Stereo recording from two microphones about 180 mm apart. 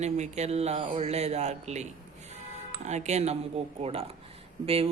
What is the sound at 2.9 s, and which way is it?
Mantra, 40° right (ahead or behind).